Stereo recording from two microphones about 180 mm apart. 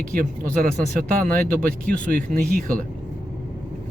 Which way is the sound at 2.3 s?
50° right (ahead or behind).